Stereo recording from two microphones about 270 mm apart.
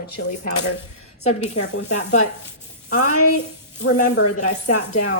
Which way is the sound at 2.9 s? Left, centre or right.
Left.